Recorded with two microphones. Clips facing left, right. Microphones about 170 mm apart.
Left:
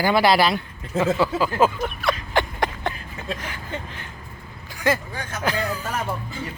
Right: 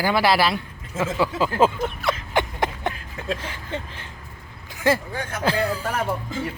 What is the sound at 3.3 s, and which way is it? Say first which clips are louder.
Speech: right 1 dB; 30° right (ahead or behind).